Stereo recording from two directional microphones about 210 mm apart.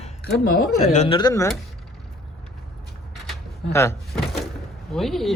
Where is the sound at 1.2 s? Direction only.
20° left (ahead or behind).